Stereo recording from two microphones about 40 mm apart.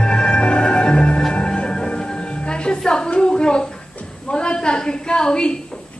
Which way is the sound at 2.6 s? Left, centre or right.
Left.